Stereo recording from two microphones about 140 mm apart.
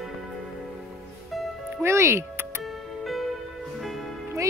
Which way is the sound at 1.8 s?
20° right (ahead or behind).